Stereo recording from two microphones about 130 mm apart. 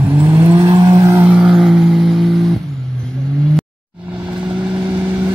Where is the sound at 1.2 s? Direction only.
5° right (ahead or behind).